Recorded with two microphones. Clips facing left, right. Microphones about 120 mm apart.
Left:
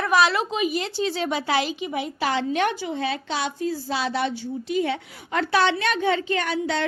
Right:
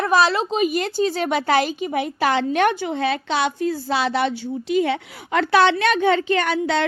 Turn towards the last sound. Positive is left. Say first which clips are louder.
# right 4 dB
turn(degrees=-70)  # may be behind; listen again after turning